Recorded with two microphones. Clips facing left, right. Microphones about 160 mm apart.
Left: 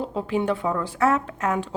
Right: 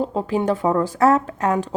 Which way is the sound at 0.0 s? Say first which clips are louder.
Right 4 dB; 40° right (ahead or behind).